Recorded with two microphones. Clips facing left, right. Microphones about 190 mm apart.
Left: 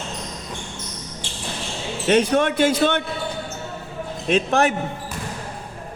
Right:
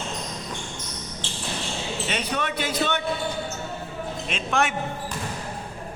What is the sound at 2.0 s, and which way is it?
Speech, 50° left (ahead or behind).